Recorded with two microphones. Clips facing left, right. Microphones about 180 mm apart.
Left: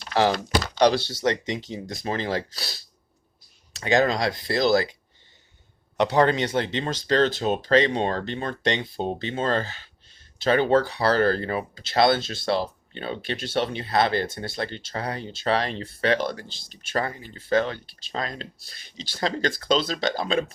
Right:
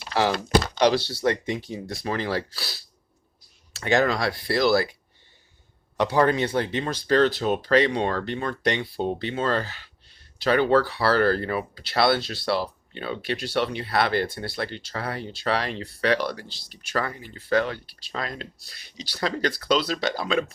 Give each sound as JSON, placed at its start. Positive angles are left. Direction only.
{"t": 0.1, "sound": "speech", "side_deg": 40}
{"t": 1.2, "sound": "speech", "side_deg": 20}
{"t": 6.0, "sound": "speech", "side_deg": 25}